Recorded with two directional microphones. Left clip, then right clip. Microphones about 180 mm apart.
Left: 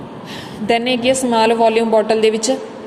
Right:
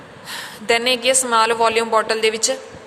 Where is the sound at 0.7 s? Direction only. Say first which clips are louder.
Left 1 dB; 30° right (ahead or behind).